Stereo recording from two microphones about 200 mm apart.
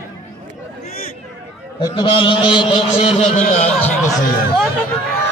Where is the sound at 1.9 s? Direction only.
25° left (ahead or behind).